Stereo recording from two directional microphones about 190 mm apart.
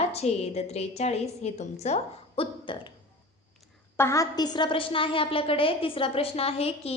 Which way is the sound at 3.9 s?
15° left (ahead or behind).